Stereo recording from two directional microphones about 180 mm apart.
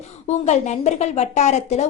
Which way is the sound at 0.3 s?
40° left (ahead or behind).